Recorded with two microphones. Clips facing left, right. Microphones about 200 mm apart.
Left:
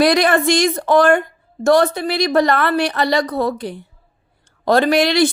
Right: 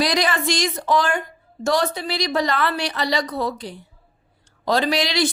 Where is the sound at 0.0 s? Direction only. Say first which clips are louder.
Left 7 dB; 60° left (ahead or behind).